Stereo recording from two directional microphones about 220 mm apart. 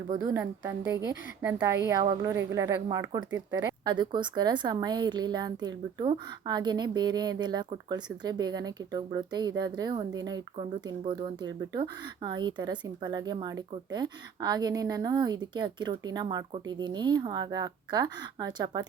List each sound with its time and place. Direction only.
0.2 s a woman's voice: 15° right (ahead or behind)